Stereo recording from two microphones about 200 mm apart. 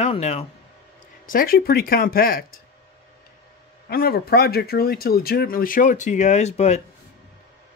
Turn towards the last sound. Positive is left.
turn(degrees=35)  # may be behind; listen again after turning